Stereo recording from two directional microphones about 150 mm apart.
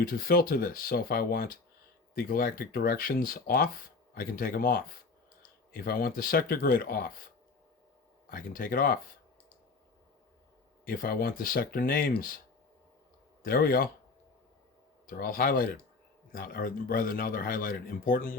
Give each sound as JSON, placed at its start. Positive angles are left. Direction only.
{"t": 0.0, "sound": "speech", "side_deg": 80}
{"t": 5.7, "sound": "speech", "side_deg": 90}
{"t": 8.3, "sound": "speech", "side_deg": 75}
{"t": 10.8, "sound": "speech", "side_deg": 75}
{"t": 13.4, "sound": "speech", "side_deg": 75}
{"t": 15.0, "sound": "speech", "side_deg": 70}